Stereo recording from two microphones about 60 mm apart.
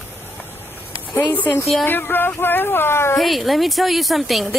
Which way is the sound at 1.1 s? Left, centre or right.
Left.